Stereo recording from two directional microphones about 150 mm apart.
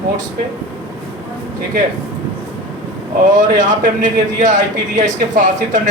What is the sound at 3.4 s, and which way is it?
Speech, 55° right (ahead or behind).